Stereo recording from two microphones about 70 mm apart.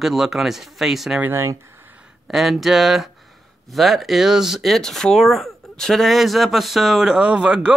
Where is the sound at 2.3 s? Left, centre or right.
Centre.